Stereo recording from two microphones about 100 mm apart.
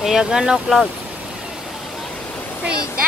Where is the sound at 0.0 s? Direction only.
5° right (ahead or behind).